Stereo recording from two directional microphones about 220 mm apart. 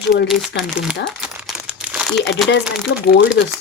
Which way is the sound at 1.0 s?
Centre (ahead or behind).